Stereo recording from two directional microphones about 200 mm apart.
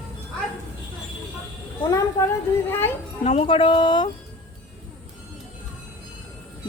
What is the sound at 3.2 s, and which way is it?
Speech, 30° left (ahead or behind).